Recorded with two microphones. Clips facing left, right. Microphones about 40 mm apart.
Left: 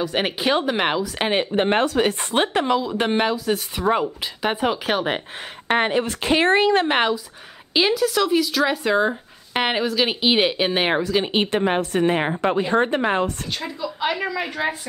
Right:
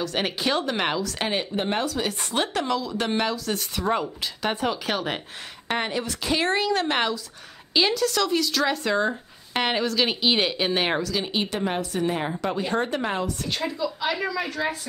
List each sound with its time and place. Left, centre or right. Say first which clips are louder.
0.0 s speech: left 4 dB; centre
5.7 s speech: left 7 dB; left
13.5 s a woman's voice: right 1 dB; centre
14.0 s speech: left 5 dB; centre